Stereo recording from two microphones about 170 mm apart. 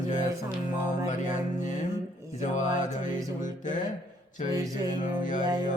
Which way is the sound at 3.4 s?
50° left (ahead or behind).